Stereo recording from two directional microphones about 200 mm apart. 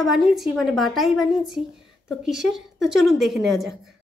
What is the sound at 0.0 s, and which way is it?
A woman's voice, centre (ahead or behind).